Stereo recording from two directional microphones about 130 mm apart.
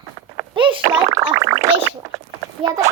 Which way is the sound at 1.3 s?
25° right (ahead or behind).